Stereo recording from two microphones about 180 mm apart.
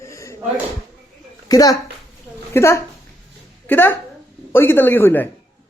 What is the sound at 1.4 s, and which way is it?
A child's voice, 20° left (ahead or behind).